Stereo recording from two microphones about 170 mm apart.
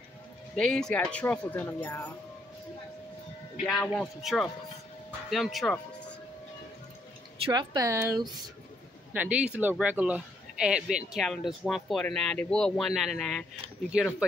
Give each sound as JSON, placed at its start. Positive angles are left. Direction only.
{"t": 0.6, "sound": "speech", "side_deg": 5}
{"t": 3.6, "sound": "speech", "side_deg": 5}
{"t": 7.4, "sound": "speech", "side_deg": -25}